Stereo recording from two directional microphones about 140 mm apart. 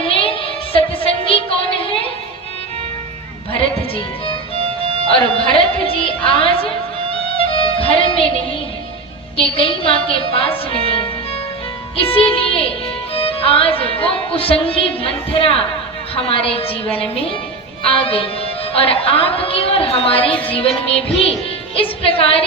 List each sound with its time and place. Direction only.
0.0 s child singing: 40° left (ahead or behind)
3.5 s music: 40° left (ahead or behind)
9.4 s a woman's voice: 40° left (ahead or behind)